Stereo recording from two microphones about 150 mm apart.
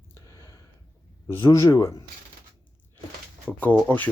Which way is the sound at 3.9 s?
15° left (ahead or behind).